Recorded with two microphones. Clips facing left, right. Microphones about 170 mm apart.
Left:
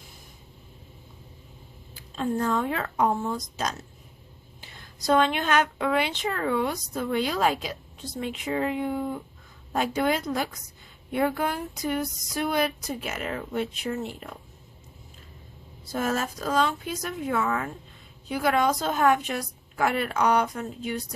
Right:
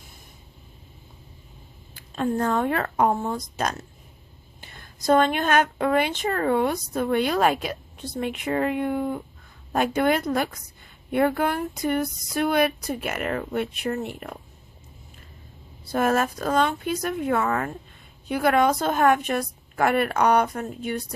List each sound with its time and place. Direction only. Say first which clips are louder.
2.0 s a woman's voice: right 3 dB; 55° right (ahead or behind)
15.9 s speech: right 5 dB; 60° right (ahead or behind)